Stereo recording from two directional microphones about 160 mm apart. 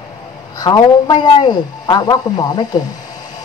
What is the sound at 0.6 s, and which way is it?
Speech, 25° left (ahead or behind).